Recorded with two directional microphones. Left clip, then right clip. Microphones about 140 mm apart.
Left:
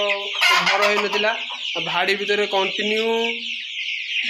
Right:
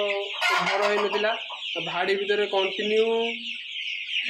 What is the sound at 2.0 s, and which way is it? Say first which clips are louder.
Chicken: left 4 dB; 15° left (ahead or behind).